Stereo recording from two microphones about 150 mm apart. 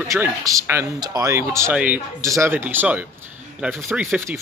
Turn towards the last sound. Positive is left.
turn(degrees=-15)  # may be behind; listen again after turning